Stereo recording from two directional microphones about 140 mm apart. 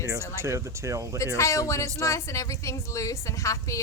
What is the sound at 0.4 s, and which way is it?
Speech, 20° right (ahead or behind).